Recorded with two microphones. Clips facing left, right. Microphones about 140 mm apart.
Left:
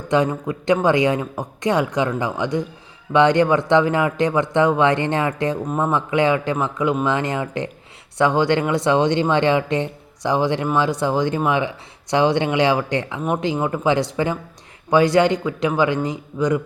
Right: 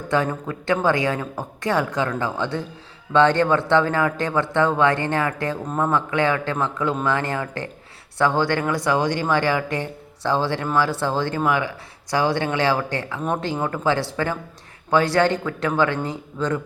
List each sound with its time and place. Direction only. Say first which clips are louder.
0.1 s a man's voice: left 4 dB; 15° left (ahead or behind)